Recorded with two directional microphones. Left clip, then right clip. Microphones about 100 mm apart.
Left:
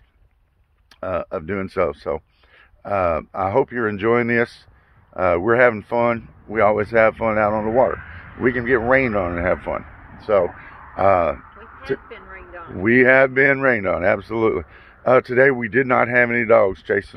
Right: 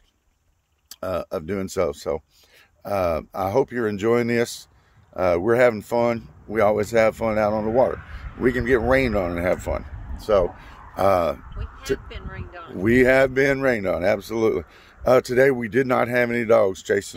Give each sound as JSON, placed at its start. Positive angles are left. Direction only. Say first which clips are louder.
{"t": 0.8, "sound": "speech", "louder": "left 2 dB", "side_deg": -35}
{"t": 10.1, "sound": "a sound", "louder": "left 2 dB", "side_deg": -45}
{"t": 12.7, "sound": "speech", "louder": "left 3 dB", "side_deg": -35}